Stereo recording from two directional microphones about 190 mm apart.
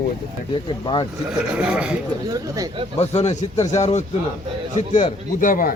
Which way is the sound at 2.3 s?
20° right (ahead or behind).